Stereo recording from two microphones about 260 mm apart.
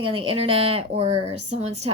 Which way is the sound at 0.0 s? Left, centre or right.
Centre.